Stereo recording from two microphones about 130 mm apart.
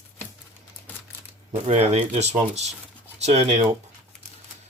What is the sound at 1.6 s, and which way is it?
Speech, 55° right (ahead or behind).